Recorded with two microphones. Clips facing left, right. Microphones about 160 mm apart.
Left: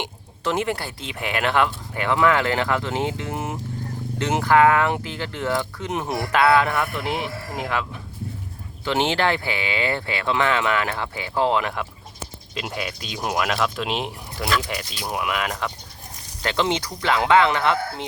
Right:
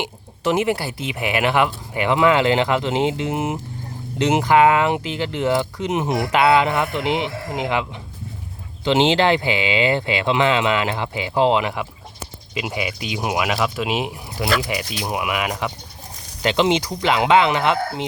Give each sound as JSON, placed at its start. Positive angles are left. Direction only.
{"t": 0.0, "sound": "bird", "side_deg": -10}
{"t": 1.0, "sound": "speech", "side_deg": -10}